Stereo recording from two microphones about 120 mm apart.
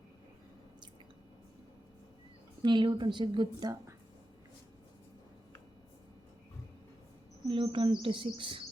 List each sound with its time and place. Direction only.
2.6 s a woman's voice: 40° right (ahead or behind)
7.4 s a woman's voice: 50° right (ahead or behind)